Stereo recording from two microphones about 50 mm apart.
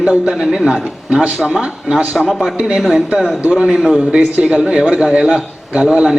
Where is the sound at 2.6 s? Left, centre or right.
Centre.